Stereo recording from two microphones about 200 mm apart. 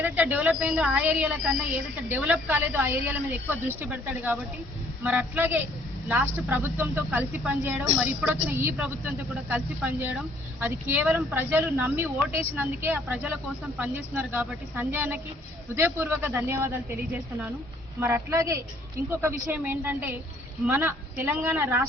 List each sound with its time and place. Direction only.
0.0 s speech: 10° right (ahead or behind)
18.0 s speech: 10° right (ahead or behind)